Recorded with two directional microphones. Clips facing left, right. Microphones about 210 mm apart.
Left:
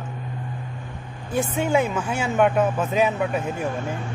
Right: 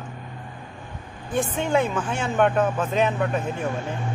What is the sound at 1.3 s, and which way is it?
Speech, 10° left (ahead or behind).